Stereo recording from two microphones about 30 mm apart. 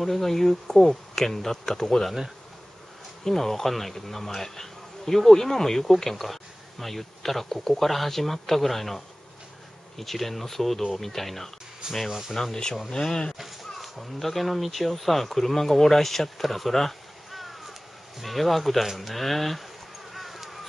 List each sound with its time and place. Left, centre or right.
0.0 s bee: centre
3.3 s bee: centre
9.9 s speech: centre
11.8 s speech: right
12.4 s bee: centre
12.9 s speech: centre
13.7 s speech: centre
20.1 s clip-clop: centre